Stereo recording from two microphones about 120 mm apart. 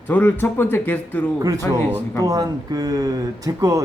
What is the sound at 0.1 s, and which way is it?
A man's voice, 15° left (ahead or behind).